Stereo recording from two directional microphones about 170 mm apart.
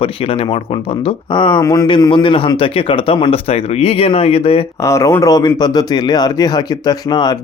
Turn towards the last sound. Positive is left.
turn(degrees=25)  # may be behind; listen again after turning